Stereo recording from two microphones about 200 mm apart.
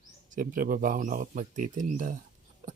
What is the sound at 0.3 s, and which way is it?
Speech, 45° right (ahead or behind).